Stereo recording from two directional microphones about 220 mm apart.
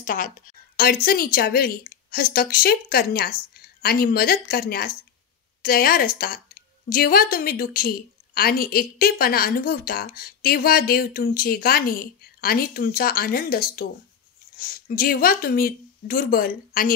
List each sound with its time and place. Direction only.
0.0 s a woman's voice: 40° left (ahead or behind)